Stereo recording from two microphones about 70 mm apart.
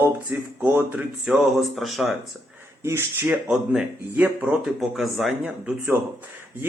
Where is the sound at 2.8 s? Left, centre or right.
Right.